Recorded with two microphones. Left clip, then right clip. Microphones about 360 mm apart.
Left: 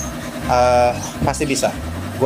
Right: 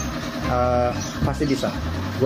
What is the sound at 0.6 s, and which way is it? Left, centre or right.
Speech, left.